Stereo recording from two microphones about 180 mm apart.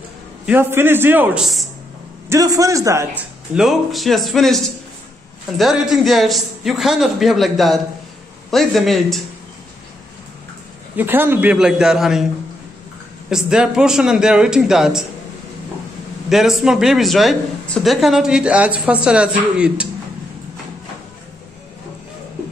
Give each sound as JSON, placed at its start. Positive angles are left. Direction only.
{"t": 0.5, "sound": "a man's voice", "side_deg": -10}
{"t": 2.2, "sound": "a man's voice", "side_deg": -20}
{"t": 3.5, "sound": "a man's voice", "side_deg": 0}
{"t": 5.6, "sound": "a man's voice", "side_deg": 0}
{"t": 11.0, "sound": "a man's voice", "side_deg": -10}
{"t": 13.3, "sound": "a man's voice", "side_deg": -5}
{"t": 16.3, "sound": "a man's voice", "side_deg": 0}